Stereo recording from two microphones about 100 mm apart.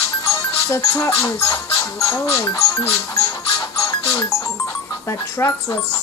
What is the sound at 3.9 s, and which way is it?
Music, 35° left (ahead or behind).